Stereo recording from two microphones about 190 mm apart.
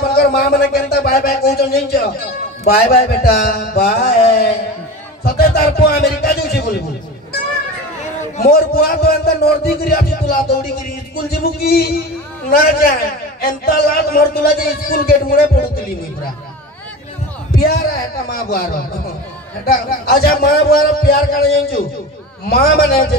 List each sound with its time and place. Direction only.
0.0 s a sound: 55° left (ahead or behind)
2.6 s a man's voice: 55° left (ahead or behind)
5.2 s a man's voice: 55° left (ahead or behind)
8.5 s a man's voice: 50° left (ahead or behind)
11.6 s a man's voice: 55° left (ahead or behind)
17.6 s a man's voice: 55° left (ahead or behind)